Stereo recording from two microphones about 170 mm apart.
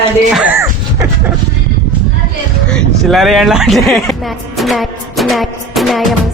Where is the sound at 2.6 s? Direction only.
5° left (ahead or behind).